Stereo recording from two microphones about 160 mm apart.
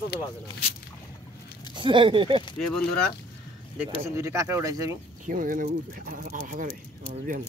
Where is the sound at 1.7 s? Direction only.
30° right (ahead or behind).